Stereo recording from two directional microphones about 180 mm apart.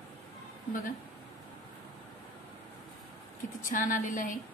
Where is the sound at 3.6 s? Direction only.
50° left (ahead or behind).